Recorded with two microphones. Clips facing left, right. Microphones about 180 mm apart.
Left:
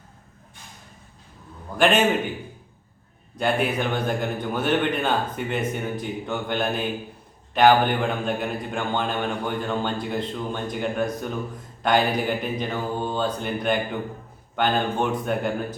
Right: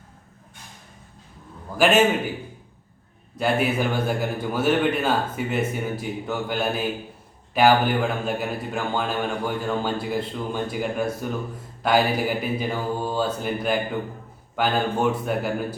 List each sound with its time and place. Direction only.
1.8 s speech: 5° right (ahead or behind)
3.3 s speech: 5° right (ahead or behind)